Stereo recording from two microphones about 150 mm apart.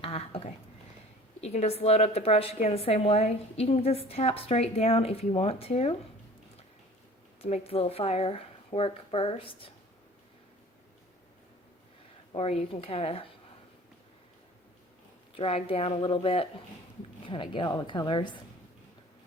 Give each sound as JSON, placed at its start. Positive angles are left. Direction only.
{"t": 0.0, "sound": "a woman's voice", "side_deg": 40}
{"t": 7.4, "sound": "a woman's voice", "side_deg": 40}
{"t": 12.3, "sound": "a woman's voice", "side_deg": 40}
{"t": 15.4, "sound": "a woman's voice", "side_deg": 40}